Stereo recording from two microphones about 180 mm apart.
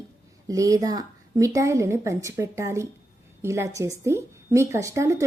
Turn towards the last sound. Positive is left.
turn(degrees=-15)  # may be behind; listen again after turning